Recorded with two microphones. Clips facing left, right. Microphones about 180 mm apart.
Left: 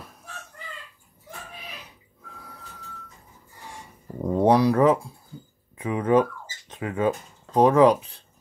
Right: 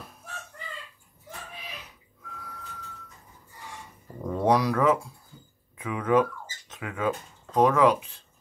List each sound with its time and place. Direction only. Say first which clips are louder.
4.2 s speech: left 5 dB; 30° left (ahead or behind)